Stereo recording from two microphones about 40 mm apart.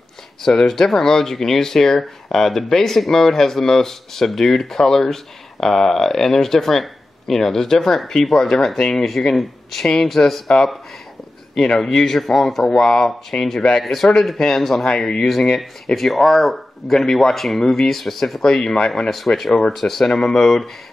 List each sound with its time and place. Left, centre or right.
0.4 s speech: centre
11.5 s speech: centre
14.9 s speech: left
15.9 s speech: centre
18.5 s speech: centre
19.0 s speech: centre